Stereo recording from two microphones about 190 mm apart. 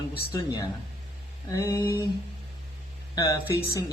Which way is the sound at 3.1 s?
15° left (ahead or behind).